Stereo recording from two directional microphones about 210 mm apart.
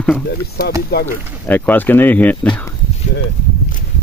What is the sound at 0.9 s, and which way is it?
Speech, 50° left (ahead or behind).